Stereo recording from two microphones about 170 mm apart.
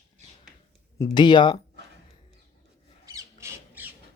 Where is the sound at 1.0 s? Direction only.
25° left (ahead or behind).